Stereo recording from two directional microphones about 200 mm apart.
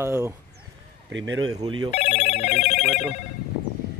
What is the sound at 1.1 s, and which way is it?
Speech, 70° right (ahead or behind).